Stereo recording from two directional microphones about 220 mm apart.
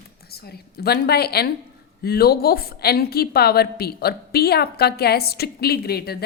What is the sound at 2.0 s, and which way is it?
A woman's voice, 45° left (ahead or behind).